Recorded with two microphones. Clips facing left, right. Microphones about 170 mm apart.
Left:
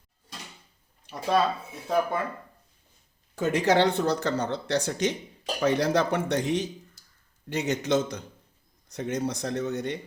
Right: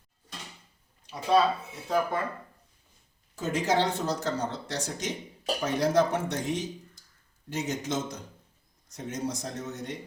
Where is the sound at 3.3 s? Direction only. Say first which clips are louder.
Left 4 dB; 65° left (ahead or behind).